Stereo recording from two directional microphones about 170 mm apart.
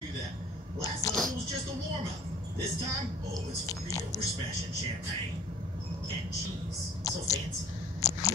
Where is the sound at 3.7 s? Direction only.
20° left (ahead or behind).